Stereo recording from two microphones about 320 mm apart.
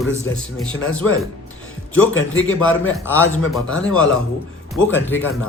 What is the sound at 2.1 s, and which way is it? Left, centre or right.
Speech, left.